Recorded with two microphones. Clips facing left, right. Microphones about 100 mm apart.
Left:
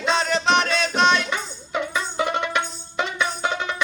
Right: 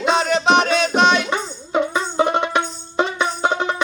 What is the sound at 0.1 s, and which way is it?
Music, 5° right (ahead or behind).